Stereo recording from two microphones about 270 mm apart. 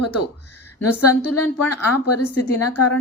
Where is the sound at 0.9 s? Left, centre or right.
Left.